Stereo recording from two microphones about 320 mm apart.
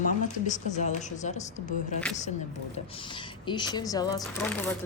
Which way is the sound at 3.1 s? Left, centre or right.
Centre.